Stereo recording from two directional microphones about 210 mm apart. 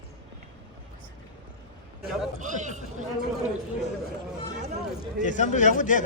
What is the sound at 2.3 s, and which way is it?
Speech, 35° right (ahead or behind).